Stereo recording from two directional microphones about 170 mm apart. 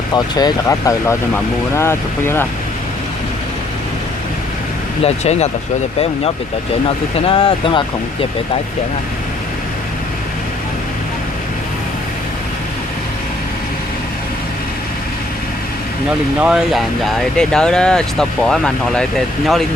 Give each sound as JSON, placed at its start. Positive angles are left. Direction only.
{"t": 0.1, "sound": "speech", "side_deg": 25}
{"t": 5.0, "sound": "speech", "side_deg": 40}
{"t": 7.2, "sound": "speech", "side_deg": 30}
{"t": 16.4, "sound": "speech", "side_deg": -5}